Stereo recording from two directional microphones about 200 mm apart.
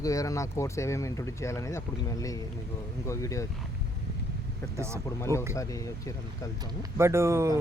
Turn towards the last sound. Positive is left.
turn(degrees=-15)  # may be behind; listen again after turning